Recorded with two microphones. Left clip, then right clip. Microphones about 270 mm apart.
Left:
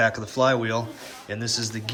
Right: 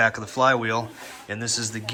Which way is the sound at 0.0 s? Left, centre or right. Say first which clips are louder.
Right 1 dB; centre.